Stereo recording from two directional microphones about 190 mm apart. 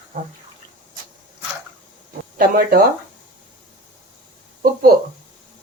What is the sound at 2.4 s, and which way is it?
Speech, 50° right (ahead or behind).